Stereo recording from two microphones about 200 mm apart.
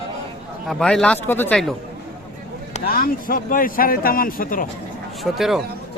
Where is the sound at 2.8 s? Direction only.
45° left (ahead or behind).